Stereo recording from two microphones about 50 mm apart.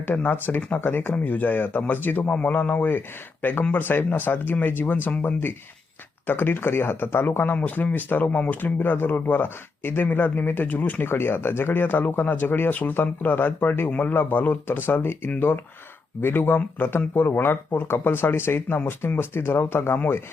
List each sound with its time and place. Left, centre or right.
0.0 s speech: left
1.1 s speech: left
11.0 s speech: left